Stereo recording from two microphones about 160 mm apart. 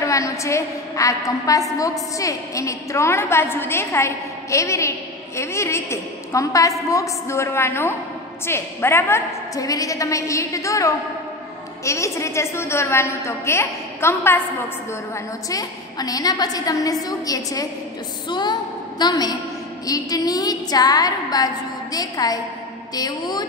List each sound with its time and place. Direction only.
0.0 s a woman's voice: 20° left (ahead or behind)
15.5 s a woman's voice: 25° left (ahead or behind)